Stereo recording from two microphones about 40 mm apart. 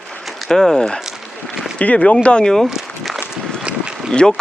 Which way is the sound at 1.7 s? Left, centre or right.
Left.